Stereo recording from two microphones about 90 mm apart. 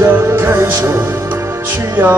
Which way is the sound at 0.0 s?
25° right (ahead or behind).